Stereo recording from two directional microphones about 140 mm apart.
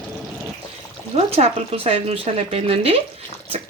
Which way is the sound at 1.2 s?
45° right (ahead or behind).